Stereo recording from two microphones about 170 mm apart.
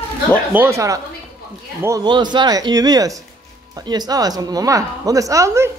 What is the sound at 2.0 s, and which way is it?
A woman's voice, 25° right (ahead or behind).